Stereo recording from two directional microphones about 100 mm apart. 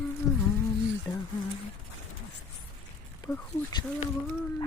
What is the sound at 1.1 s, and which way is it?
Speech, 45° left (ahead or behind).